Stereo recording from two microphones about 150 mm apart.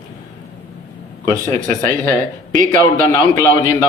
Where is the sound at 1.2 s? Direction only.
20° left (ahead or behind).